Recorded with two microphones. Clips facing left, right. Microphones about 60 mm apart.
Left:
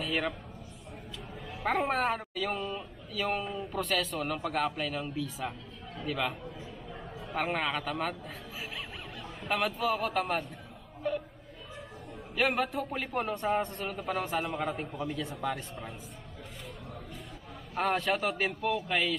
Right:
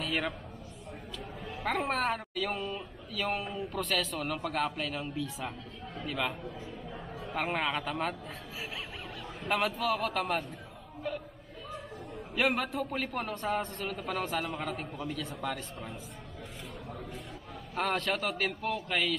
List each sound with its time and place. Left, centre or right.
0.0 s a sound: centre
1.6 s speech: centre
1.9 s speech: centre
9.4 s speech: centre
12.4 s a man's voice: centre
17.7 s a man's voice: centre